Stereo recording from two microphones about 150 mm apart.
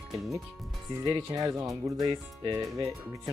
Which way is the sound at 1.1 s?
25° right (ahead or behind).